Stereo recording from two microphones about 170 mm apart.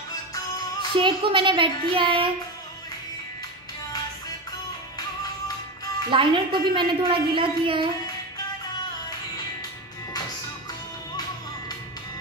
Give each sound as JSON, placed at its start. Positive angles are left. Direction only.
{"t": 0.9, "sound": "a woman's voice", "side_deg": -30}
{"t": 6.0, "sound": "a woman's voice", "side_deg": -30}